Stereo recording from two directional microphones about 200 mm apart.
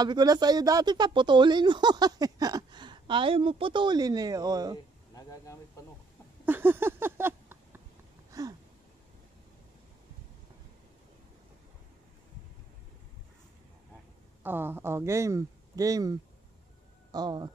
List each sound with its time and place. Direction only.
0.0 s speech: 20° right (ahead or behind)
5.1 s speech: 15° left (ahead or behind)
6.4 s a sound: 10° right (ahead or behind)
14.4 s speech: 10° right (ahead or behind)